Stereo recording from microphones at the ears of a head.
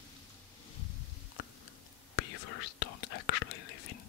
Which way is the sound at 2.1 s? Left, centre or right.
Left.